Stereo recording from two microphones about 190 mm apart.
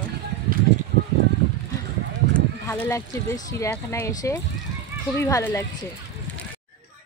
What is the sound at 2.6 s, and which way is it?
Speech, 15° left (ahead or behind).